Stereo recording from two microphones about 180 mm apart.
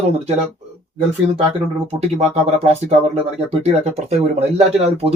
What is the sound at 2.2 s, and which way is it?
Speech, 35° right (ahead or behind).